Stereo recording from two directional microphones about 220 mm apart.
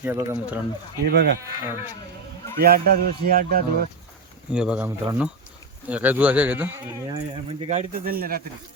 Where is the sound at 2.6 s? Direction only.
45° right (ahead or behind).